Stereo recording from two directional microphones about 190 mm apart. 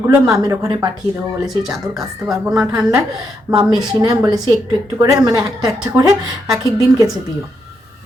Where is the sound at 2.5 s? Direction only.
20° right (ahead or behind).